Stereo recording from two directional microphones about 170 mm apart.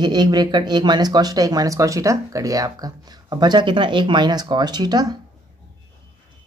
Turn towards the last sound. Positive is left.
turn(degrees=-25)  # may be behind; listen again after turning